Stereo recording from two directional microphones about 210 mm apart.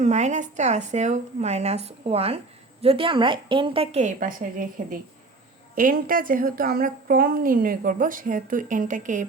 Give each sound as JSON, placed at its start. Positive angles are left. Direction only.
{"t": 0.0, "sound": "a woman's voice", "side_deg": -35}